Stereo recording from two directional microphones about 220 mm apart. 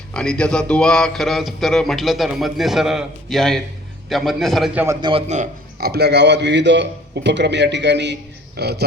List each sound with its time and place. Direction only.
0.1 s speech: 5° left (ahead or behind)
4.9 s a man's voice: 20° right (ahead or behind)
5.3 s speech: 35° right (ahead or behind)
5.9 s a man's voice: 50° right (ahead or behind)